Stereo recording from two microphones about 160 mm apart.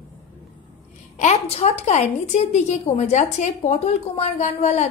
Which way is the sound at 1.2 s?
40° left (ahead or behind).